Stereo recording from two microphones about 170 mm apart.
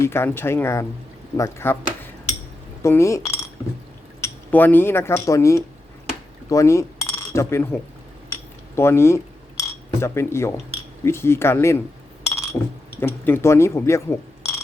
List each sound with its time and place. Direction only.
0.0 s speech: 15° left (ahead or behind)
2.8 s speech: 15° left (ahead or behind)
8.3 s cutlery: 15° left (ahead or behind)
10.0 s speech: 15° left (ahead or behind)
12.3 s chink: 15° left (ahead or behind)
13.0 s speech: 15° left (ahead or behind)